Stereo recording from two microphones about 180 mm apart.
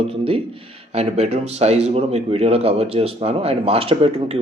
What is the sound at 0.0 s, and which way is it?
Speech, 30° right (ahead or behind).